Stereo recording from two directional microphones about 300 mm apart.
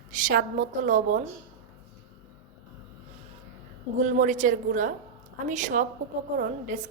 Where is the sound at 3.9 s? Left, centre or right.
Right.